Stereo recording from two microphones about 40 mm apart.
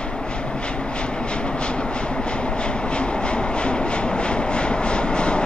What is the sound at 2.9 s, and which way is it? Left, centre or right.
Train, left.